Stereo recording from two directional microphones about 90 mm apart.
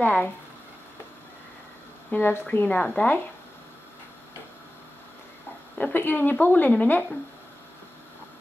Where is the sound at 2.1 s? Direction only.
20° left (ahead or behind).